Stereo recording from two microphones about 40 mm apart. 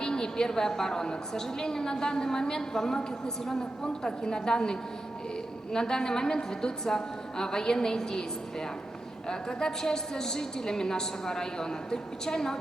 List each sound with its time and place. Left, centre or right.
0.0 s a woman's voice: centre
4.0 s a woman's voice: centre
9.3 s a woman's voice: centre